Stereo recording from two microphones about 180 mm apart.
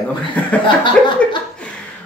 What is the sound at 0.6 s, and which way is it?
Speech, 25° left (ahead or behind).